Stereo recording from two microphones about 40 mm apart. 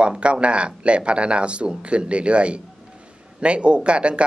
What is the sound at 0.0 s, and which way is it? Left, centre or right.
Speech, right.